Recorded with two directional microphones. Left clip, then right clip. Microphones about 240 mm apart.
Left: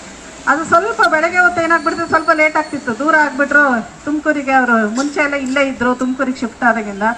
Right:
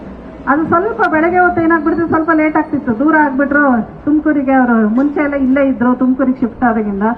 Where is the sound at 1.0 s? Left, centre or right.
Left.